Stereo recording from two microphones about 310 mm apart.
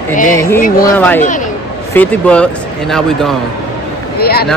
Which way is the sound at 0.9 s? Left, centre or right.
Centre.